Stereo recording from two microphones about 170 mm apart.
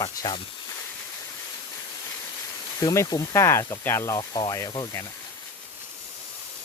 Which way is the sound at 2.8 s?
20° left (ahead or behind).